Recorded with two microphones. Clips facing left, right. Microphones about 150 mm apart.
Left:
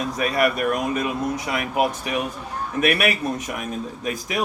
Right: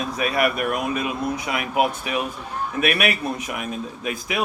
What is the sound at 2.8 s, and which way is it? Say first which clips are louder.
A man's voice: left 2 dB; 40° left (ahead or behind).